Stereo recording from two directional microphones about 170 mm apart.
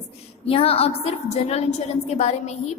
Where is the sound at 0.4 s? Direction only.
35° left (ahead or behind).